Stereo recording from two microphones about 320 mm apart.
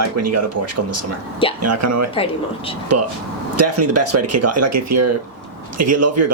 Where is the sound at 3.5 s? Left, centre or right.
Right.